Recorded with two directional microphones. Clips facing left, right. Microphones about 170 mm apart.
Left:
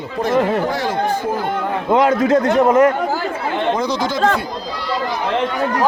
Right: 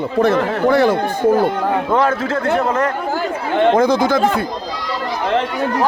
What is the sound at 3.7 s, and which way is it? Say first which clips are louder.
Speech: right 6 dB; 50° right (ahead or behind).